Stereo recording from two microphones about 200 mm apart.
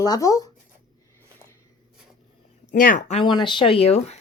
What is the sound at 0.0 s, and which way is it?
Speech, 20° left (ahead or behind).